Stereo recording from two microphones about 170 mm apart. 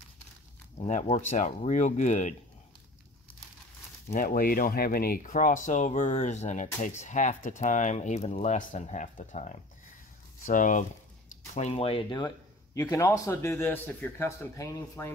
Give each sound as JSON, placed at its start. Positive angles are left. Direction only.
{"t": 0.7, "sound": "speech", "side_deg": 45}
{"t": 4.1, "sound": "speech", "side_deg": 55}
{"t": 12.8, "sound": "a man's voice", "side_deg": 15}